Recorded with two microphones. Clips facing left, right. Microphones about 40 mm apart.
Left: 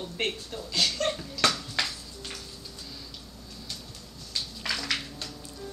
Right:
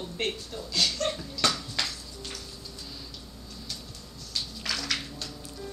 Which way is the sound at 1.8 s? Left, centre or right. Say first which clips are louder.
Left 2 dB; centre.